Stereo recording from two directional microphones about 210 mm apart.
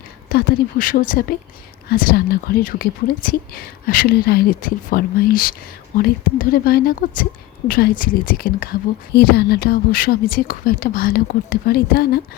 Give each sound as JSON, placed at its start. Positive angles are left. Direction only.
{"t": 0.3, "sound": "a woman's voice", "side_deg": 40}